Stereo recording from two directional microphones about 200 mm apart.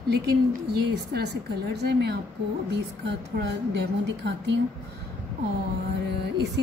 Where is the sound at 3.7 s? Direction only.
60° right (ahead or behind).